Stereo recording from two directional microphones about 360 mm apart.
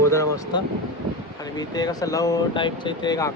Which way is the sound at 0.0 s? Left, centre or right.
Centre.